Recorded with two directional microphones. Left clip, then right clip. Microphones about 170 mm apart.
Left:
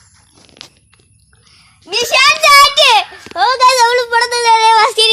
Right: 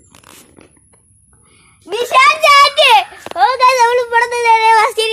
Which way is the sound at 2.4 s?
20° left (ahead or behind).